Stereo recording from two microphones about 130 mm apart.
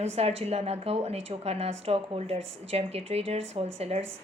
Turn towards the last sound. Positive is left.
turn(degrees=-55)  # may be behind; listen again after turning